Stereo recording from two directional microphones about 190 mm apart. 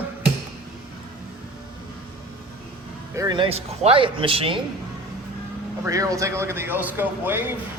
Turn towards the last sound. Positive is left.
turn(degrees=-10)  # may be behind; listen again after turning